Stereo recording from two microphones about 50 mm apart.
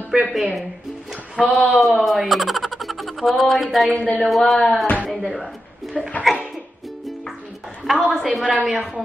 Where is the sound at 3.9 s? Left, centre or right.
Left.